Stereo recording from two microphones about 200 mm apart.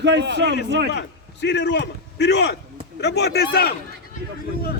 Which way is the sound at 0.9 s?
60° left (ahead or behind).